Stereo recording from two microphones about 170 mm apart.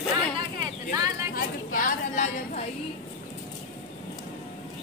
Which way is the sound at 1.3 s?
55° left (ahead or behind).